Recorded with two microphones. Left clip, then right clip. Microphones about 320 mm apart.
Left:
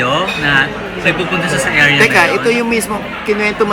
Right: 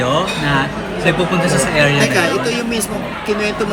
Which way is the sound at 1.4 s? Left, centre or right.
Right.